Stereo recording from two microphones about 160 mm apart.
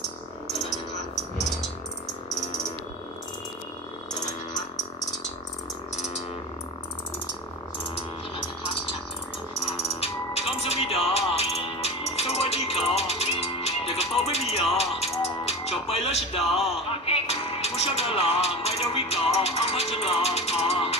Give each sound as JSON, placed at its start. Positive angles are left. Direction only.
{"t": 0.5, "sound": "music", "side_deg": 0}
{"t": 9.6, "sound": "music", "side_deg": 35}